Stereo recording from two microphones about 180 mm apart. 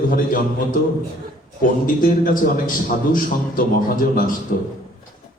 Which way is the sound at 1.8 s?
50° left (ahead or behind).